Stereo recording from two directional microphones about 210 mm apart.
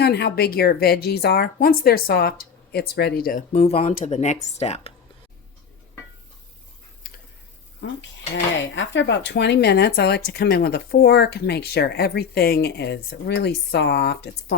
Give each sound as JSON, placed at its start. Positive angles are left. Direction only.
{"t": 0.0, "sound": "speech", "side_deg": 50}
{"t": 3.5, "sound": "speech", "side_deg": 30}
{"t": 8.7, "sound": "speech", "side_deg": 60}